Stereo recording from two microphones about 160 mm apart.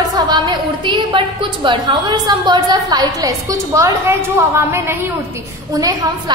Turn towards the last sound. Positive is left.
turn(degrees=-20)  # may be behind; listen again after turning